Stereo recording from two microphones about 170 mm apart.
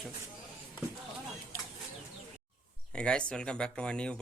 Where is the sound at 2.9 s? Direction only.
5° left (ahead or behind).